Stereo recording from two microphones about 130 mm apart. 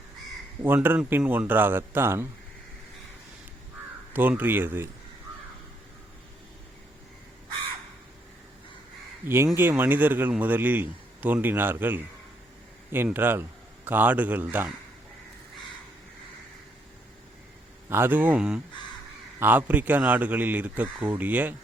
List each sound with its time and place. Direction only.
0.6 s speech: 15° right (ahead or behind)
4.1 s speech: 15° right (ahead or behind)
9.2 s speech: 20° right (ahead or behind)
13.1 s speech: 15° right (ahead or behind)
17.8 s speech: 15° right (ahead or behind)